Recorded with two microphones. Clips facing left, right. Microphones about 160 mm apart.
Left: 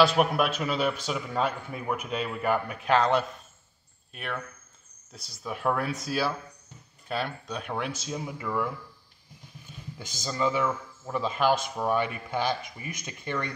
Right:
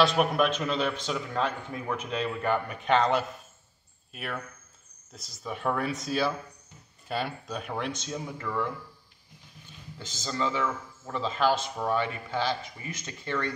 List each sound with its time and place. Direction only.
0.0 s speech: 5° left (ahead or behind)
9.9 s speech: 10° left (ahead or behind)